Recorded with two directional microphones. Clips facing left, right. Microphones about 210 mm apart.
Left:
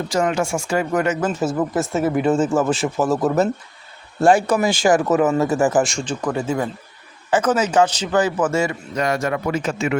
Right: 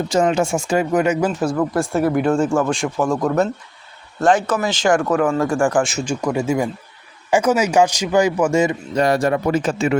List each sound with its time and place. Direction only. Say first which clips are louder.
0.1 s speech: right 3 dB; 25° right (ahead or behind)
1.3 s a man's voice: right 1 dB; centre (ahead or behind); by 8.7 s 15° right (ahead or behind)
9.0 s a man's voice: right 4 dB; 35° right (ahead or behind)